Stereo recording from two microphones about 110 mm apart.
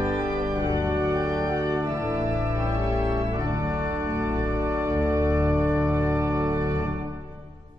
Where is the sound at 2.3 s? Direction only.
20° right (ahead or behind).